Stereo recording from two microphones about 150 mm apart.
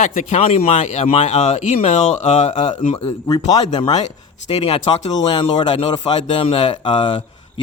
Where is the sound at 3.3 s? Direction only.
25° left (ahead or behind).